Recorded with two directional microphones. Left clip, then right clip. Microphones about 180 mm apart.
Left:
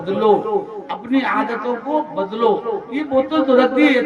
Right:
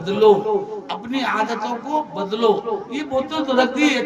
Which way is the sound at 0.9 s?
55° right (ahead or behind).